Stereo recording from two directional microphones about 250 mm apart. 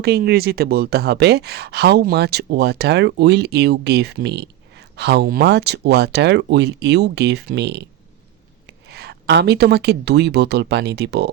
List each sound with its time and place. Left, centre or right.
0.0 s speech: right